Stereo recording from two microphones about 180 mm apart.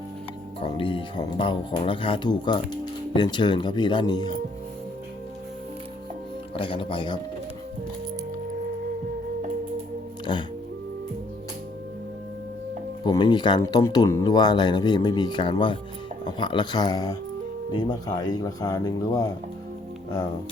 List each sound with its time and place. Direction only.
0.6 s speech: 30° left (ahead or behind)
6.6 s speech: 30° left (ahead or behind)
10.3 s speech: 25° left (ahead or behind)
13.1 s speech: 25° left (ahead or behind)